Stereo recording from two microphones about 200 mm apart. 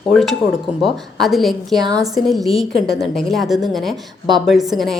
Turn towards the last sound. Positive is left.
turn(degrees=0)  # may be behind; listen again after turning